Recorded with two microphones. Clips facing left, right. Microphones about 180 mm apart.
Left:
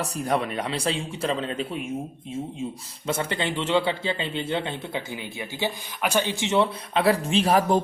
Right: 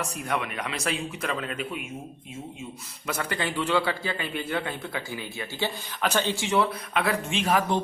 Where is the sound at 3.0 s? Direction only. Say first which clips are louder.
Left 3 dB; 25° left (ahead or behind).